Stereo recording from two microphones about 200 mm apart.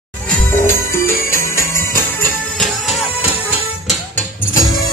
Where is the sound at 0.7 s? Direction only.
10° left (ahead or behind).